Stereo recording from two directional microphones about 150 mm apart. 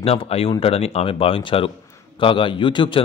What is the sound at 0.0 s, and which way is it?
A man's voice, 40° left (ahead or behind).